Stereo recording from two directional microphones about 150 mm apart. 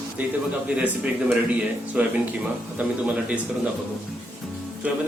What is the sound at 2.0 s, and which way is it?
Speech, 10° right (ahead or behind).